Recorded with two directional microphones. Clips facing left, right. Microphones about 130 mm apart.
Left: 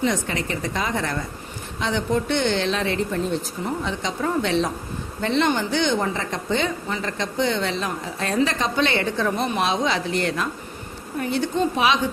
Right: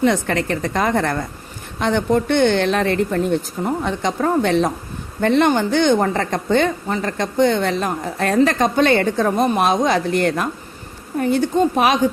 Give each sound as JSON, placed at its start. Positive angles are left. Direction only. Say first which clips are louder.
{"t": 0.0, "sound": "a woman's voice", "louder": "right 6 dB", "side_deg": -60}